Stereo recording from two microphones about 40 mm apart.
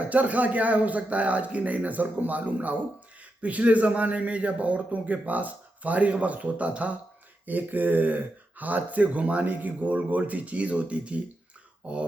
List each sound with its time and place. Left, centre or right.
0.1 s speech: right
7.4 s speech: right